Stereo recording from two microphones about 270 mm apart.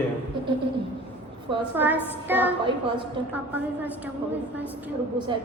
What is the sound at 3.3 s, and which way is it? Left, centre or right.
A woman's voice, centre.